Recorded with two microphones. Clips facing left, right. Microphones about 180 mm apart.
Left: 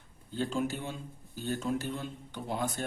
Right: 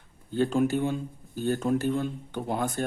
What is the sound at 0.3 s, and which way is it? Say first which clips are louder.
Speech: right 8 dB; 55° right (ahead or behind).